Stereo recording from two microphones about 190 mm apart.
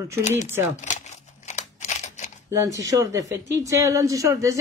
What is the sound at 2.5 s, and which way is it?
Speech, 20° right (ahead or behind).